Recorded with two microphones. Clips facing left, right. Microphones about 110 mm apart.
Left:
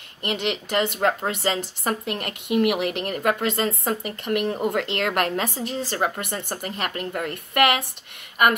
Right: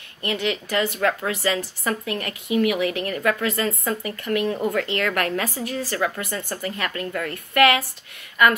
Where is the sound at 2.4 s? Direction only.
65° left (ahead or behind).